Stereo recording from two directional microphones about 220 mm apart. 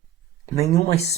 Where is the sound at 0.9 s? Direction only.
30° left (ahead or behind).